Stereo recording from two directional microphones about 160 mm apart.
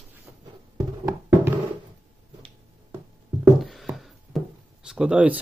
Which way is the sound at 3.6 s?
Centre (ahead or behind).